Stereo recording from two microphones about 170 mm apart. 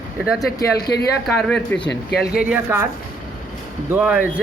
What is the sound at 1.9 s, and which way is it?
Speech, 70° left (ahead or behind).